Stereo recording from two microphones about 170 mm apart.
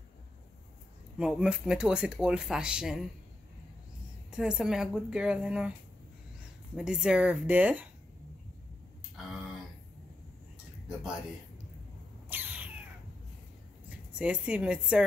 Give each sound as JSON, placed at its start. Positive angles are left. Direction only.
{"t": 1.1, "sound": "speech", "side_deg": -5}
{"t": 4.3, "sound": "speech", "side_deg": -5}
{"t": 6.8, "sound": "speech", "side_deg": -5}
{"t": 12.3, "sound": "cat", "side_deg": -10}
{"t": 13.8, "sound": "a woman's voice", "side_deg": -5}